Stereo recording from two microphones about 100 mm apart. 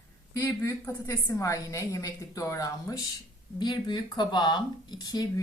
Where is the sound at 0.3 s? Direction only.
30° left (ahead or behind).